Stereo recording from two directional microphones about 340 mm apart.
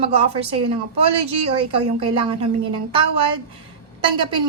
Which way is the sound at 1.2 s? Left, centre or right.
Right.